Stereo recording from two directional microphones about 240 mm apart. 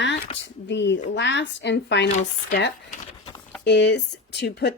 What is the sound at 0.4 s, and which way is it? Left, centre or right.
Speech, left.